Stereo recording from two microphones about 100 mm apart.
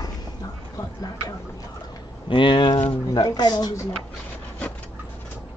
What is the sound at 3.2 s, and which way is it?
Speech, 45° left (ahead or behind).